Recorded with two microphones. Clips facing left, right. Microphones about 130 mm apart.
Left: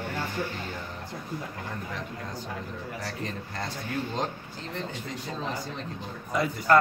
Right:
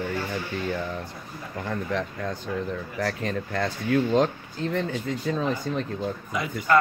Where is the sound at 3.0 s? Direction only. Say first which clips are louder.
Right 11 dB; 70° right (ahead or behind).